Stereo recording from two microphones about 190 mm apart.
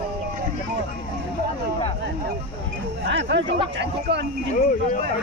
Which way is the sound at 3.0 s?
65° right (ahead or behind).